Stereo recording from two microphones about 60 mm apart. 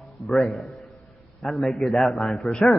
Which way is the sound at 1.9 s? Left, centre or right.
Centre.